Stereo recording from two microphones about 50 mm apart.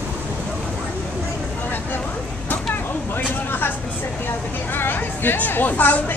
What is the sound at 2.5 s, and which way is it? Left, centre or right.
Vehicle, left.